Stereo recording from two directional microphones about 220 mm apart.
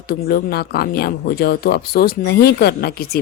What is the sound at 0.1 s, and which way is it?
Speech, 45° left (ahead or behind).